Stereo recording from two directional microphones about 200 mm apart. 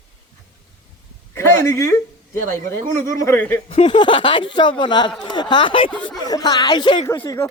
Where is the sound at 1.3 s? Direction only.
15° left (ahead or behind).